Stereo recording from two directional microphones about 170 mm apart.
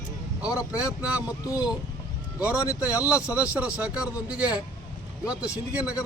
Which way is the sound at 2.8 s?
10° right (ahead or behind).